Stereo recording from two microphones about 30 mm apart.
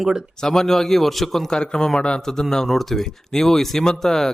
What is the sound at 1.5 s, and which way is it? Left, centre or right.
Speech, left.